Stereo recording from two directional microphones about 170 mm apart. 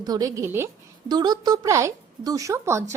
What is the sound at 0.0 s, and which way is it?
A woman's voice, 20° right (ahead or behind).